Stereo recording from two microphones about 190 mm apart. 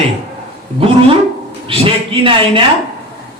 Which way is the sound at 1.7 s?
30° right (ahead or behind).